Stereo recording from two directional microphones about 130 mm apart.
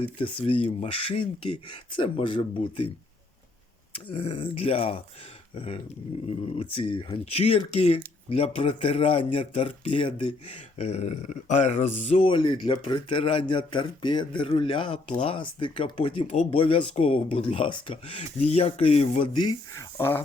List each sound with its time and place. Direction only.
0.0 s speech: 45° left (ahead or behind)
3.9 s speech: 45° left (ahead or behind)
12.3 s speech: 40° left (ahead or behind)
16.2 s speech: 60° left (ahead or behind)
16.5 s speech: 45° left (ahead or behind)
18.2 s speech: 55° left (ahead or behind)
19.3 s speech: 35° left (ahead or behind)
20.0 s speech: 20° left (ahead or behind)